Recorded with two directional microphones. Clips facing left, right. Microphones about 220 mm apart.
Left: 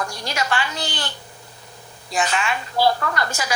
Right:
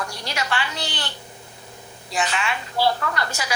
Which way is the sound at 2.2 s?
45° left (ahead or behind).